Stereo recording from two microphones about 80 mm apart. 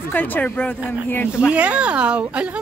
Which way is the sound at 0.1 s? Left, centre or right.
Left.